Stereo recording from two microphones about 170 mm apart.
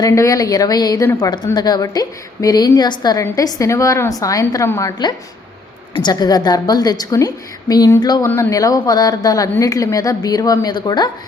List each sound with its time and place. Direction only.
0.0 s speech: 20° left (ahead or behind)